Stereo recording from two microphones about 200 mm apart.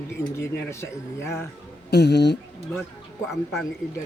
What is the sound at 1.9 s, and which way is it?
Speech, 55° left (ahead or behind).